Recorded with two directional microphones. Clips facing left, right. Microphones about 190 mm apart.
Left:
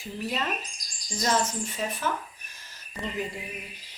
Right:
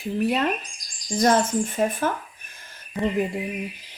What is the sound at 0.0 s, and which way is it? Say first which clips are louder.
Speech: right 9 dB; 60° right (ahead or behind).